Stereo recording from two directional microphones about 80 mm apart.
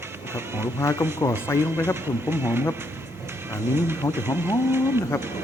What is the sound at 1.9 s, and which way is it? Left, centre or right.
Speech, right.